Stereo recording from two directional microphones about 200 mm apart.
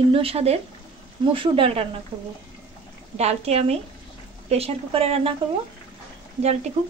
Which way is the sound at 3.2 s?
30° right (ahead or behind).